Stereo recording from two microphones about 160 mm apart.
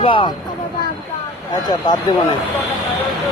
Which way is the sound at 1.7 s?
25° left (ahead or behind).